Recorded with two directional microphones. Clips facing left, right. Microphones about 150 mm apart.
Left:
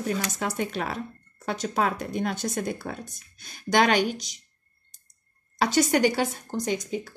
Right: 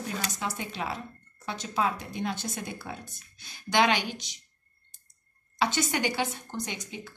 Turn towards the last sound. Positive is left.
turn(degrees=40)  # may be behind; listen again after turning